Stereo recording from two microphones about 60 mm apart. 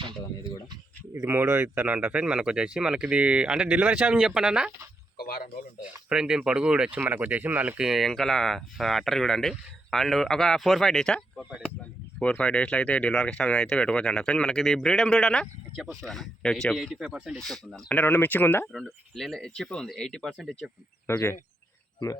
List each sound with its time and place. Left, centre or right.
1.3 s speech: right
2.2 s speech: centre
6.1 s speech: centre
7.1 s speech: right
7.8 s speech: centre
12.2 s speech: centre
14.6 s speech: centre
16.7 s speech: centre
17.3 s speech: centre
18.0 s speech: left
18.7 s speech: centre
20.4 s speech: centre
21.1 s speech: left